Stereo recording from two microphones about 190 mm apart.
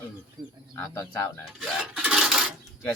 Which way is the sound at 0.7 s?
20° left (ahead or behind).